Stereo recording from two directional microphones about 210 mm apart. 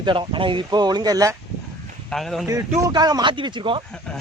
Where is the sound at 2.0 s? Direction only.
Centre (ahead or behind).